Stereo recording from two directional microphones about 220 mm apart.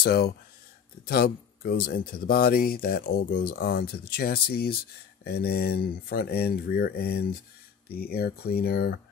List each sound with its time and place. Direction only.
0.0 s speech: 45° left (ahead or behind)